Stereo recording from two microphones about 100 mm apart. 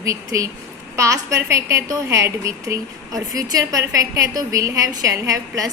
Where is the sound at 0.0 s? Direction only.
35° right (ahead or behind).